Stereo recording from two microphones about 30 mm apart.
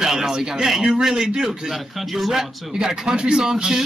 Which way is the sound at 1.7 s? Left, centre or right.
Centre.